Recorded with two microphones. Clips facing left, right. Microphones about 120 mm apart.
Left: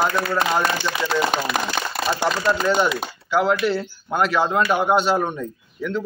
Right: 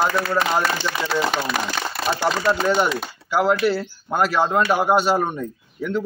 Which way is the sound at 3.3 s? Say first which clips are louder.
Right 1 dB; 5° right (ahead or behind).